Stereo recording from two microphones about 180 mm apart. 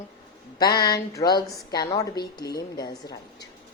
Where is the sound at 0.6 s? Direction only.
25° left (ahead or behind).